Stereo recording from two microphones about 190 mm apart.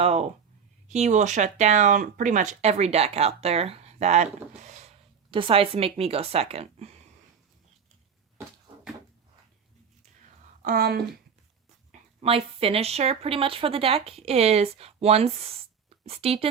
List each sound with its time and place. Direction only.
0.0 s speech: 30° right (ahead or behind)
5.3 s speech: 30° right (ahead or behind)
10.6 s speech: 50° right (ahead or behind)
11.9 s speech: 30° right (ahead or behind)